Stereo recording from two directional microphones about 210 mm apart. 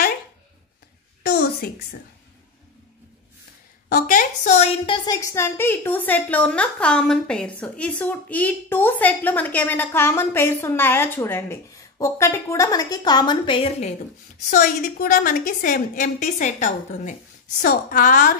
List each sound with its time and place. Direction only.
1.2 s a sound: 50° left (ahead or behind)
3.9 s a woman's voice: 40° left (ahead or behind)
4.8 s a woman's voice: 20° left (ahead or behind)
14.5 s a woman's voice: 45° left (ahead or behind)